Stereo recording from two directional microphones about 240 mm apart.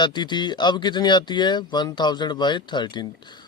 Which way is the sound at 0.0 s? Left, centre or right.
Centre.